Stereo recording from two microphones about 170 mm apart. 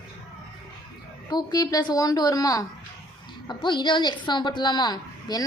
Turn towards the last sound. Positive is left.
turn(degrees=25)  # may be behind; listen again after turning